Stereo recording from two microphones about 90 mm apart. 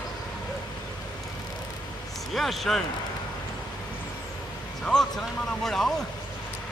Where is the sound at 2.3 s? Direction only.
Centre (ahead or behind).